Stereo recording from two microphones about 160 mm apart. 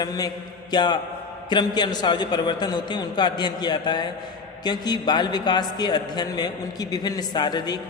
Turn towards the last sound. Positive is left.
turn(degrees=25)  # may be behind; listen again after turning